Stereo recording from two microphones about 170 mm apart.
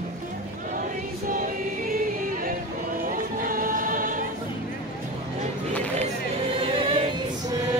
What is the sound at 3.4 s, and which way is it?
Music, 55° right (ahead or behind).